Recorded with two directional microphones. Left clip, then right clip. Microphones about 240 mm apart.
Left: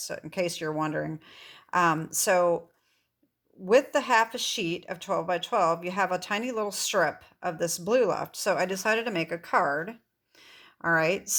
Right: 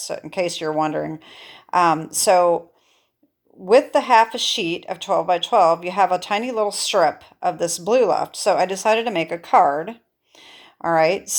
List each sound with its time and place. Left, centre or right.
0.1 s speech: left
3.7 s speech: left
10.4 s a sound: left